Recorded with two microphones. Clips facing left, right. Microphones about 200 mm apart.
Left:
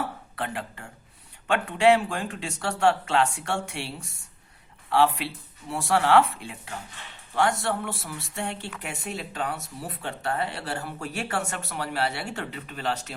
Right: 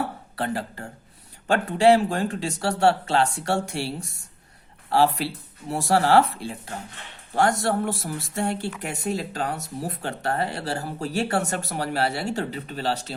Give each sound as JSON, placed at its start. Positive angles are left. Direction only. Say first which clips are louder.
{"t": 0.3, "sound": "speech", "louder": "right 5 dB", "side_deg": -35}